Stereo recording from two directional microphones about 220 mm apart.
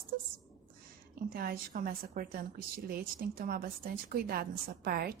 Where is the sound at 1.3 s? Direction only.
40° right (ahead or behind).